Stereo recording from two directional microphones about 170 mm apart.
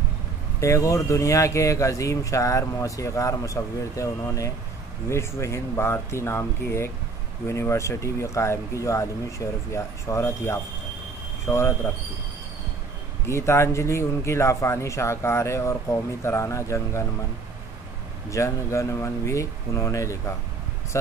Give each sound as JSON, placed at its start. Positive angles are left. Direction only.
{"t": 0.6, "sound": "speech", "side_deg": 20}
{"t": 13.3, "sound": "speech", "side_deg": 15}
{"t": 18.3, "sound": "speech", "side_deg": 15}